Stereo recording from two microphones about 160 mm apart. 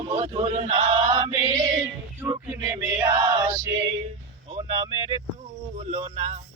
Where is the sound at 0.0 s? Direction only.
35° right (ahead or behind).